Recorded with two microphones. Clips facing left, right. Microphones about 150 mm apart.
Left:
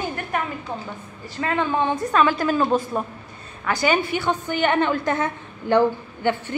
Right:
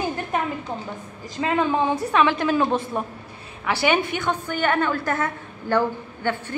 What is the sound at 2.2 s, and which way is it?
A woman's voice, centre (ahead or behind).